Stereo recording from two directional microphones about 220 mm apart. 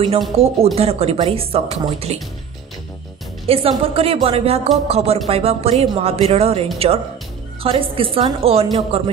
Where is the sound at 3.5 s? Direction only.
25° right (ahead or behind).